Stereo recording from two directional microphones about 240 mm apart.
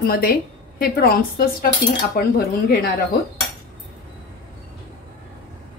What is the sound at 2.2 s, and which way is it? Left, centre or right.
Speech, left.